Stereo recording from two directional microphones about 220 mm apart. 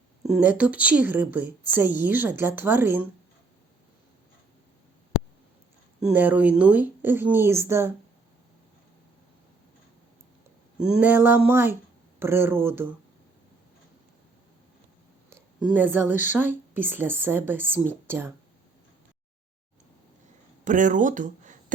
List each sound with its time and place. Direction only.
0.2 s speech: 5° right (ahead or behind)
6.0 s speech: 5° right (ahead or behind)
10.8 s speech: 5° right (ahead or behind)
15.4 s speech: 5° right (ahead or behind)
20.7 s speech: 35° right (ahead or behind)